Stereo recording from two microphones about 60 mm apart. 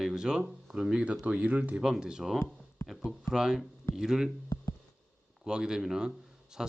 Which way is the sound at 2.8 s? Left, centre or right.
Left.